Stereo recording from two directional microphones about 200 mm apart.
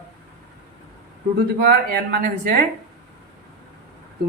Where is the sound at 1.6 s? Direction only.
50° right (ahead or behind).